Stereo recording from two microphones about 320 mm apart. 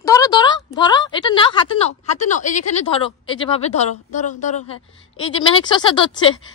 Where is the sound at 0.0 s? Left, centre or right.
Centre.